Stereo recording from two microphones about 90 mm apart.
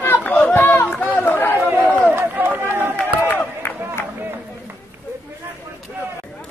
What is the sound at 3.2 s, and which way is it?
Crowd, 20° left (ahead or behind).